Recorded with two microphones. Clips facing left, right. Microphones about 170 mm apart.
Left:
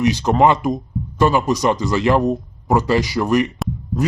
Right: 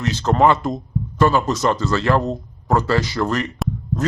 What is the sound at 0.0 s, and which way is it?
A man's voice, 15° left (ahead or behind).